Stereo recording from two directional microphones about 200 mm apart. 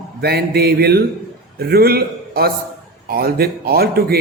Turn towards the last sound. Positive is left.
turn(degrees=-50)  # may be behind; listen again after turning